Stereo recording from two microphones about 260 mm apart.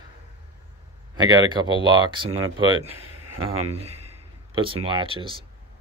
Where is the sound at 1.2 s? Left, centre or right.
Centre.